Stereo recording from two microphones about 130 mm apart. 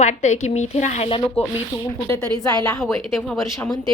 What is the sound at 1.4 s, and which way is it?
Speech, 50° left (ahead or behind).